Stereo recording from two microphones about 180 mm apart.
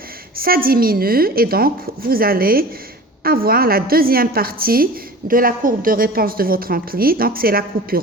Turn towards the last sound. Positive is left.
turn(degrees=-55)  # may be behind; listen again after turning